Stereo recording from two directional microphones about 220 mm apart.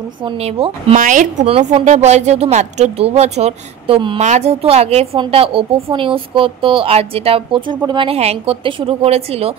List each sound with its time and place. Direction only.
0.2 s speech: 25° right (ahead or behind)